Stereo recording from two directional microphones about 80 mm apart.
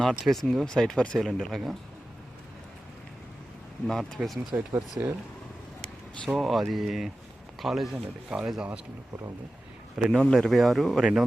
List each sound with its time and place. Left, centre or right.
0.0 s speech: centre
3.8 s speech: centre
4.5 s speech: right
6.2 s speech: centre
9.9 s a man's voice: centre
10.2 s speech: centre